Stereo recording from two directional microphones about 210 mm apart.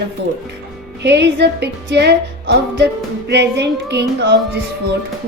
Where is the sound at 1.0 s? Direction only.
55° right (ahead or behind).